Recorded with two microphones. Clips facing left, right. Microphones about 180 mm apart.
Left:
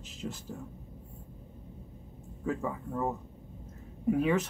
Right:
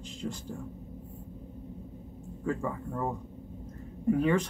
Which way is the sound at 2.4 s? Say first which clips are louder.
Right 1 dB; 5° left (ahead or behind).